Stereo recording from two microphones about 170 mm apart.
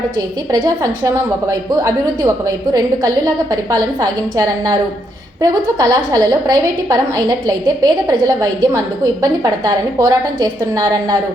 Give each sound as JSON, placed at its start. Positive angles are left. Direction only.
{"t": 0.5, "sound": "a woman's voice", "side_deg": -20}